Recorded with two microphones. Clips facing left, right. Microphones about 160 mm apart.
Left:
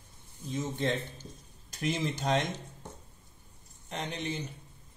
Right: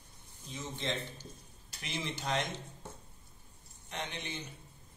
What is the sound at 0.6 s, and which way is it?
Speech, 50° left (ahead or behind).